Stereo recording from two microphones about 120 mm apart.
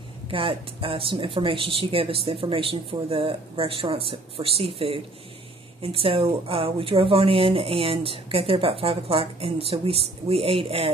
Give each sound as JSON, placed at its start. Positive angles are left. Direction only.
{"t": 0.3, "sound": "a woman's voice", "side_deg": -45}